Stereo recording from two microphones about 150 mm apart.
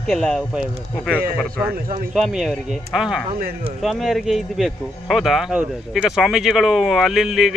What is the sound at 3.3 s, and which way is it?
Speech, 70° right (ahead or behind).